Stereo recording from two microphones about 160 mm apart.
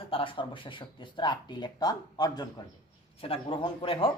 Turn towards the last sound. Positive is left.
turn(degrees=35)  # may be behind; listen again after turning